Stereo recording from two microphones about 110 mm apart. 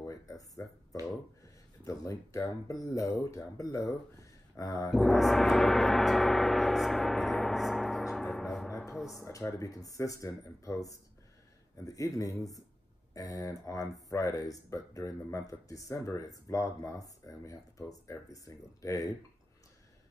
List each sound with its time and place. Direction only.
0.0 s a sound: 30° left (ahead or behind)
1.9 s speech: 30° left (ahead or behind)
4.9 s gong: centre (ahead or behind)
8.6 s music: 25° left (ahead or behind)
8.9 s speech: centre (ahead or behind)
9.2 s speech: 25° left (ahead or behind)